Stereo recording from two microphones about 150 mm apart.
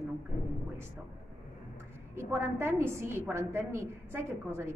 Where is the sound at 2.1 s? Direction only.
15° right (ahead or behind).